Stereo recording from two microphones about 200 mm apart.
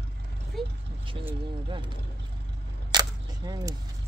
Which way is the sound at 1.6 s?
25° right (ahead or behind).